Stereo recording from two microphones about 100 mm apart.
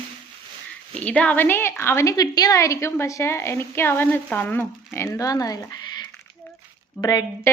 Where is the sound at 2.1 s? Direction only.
40° left (ahead or behind).